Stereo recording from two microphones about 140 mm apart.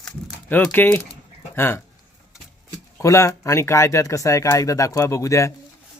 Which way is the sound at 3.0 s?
20° left (ahead or behind).